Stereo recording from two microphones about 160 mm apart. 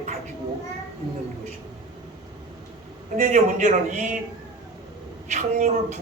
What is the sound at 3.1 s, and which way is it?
Speech, 55° right (ahead or behind).